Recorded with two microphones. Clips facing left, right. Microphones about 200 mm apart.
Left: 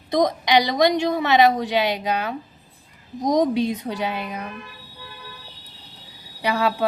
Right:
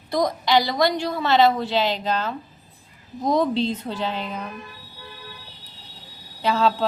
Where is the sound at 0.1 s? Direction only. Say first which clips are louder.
Left 2 dB; 20° left (ahead or behind).